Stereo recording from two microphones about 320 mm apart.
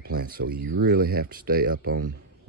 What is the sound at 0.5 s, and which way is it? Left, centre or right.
Speech, right.